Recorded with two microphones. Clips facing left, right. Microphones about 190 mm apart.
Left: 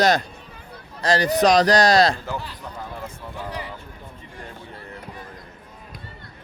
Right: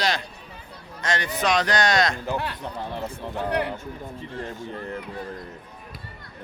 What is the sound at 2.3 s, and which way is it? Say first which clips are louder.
A man's voice: right 3 dB; 65° right (ahead or behind).